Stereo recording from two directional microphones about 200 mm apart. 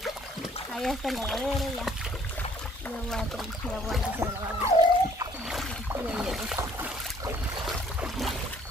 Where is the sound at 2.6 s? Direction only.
5° left (ahead or behind).